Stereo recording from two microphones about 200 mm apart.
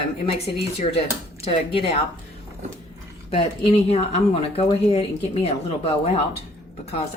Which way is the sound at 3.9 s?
30° left (ahead or behind).